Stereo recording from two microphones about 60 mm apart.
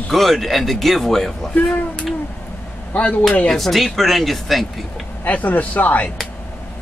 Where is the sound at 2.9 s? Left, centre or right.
Left.